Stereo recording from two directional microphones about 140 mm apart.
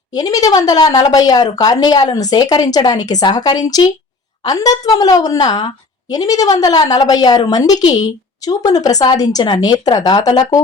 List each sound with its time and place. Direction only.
0.1 s a woman's voice: 25° left (ahead or behind)